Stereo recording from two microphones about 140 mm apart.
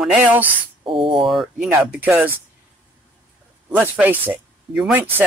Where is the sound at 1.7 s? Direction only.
10° right (ahead or behind).